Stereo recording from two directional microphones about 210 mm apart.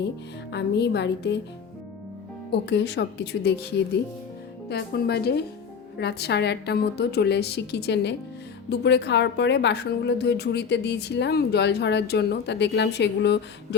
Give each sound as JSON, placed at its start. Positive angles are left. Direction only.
{"t": 0.5, "sound": "a woman's voice", "side_deg": 55}
{"t": 2.5, "sound": "a woman's voice", "side_deg": 55}
{"t": 4.7, "sound": "a woman's voice", "side_deg": 50}